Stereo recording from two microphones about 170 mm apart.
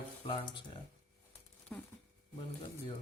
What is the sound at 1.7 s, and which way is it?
Crumpling, 5° left (ahead or behind).